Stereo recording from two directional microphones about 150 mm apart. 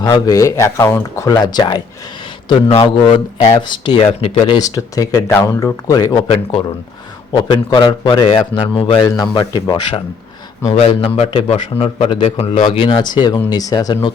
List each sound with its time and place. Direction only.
0.0 s speech: 20° left (ahead or behind)
1.3 s a man's voice: 25° left (ahead or behind)
4.0 s speech: 45° left (ahead or behind)
4.5 s speech: 25° left (ahead or behind)
6.2 s speech: 40° left (ahead or behind)
7.3 s a man's voice: 30° left (ahead or behind)